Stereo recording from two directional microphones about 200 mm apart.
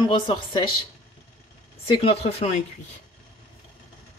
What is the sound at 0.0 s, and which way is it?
Speech, 20° left (ahead or behind).